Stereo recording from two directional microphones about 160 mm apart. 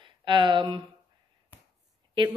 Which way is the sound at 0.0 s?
30° right (ahead or behind).